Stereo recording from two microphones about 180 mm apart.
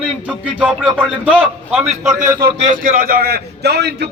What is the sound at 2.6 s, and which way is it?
A man's voice, 45° right (ahead or behind).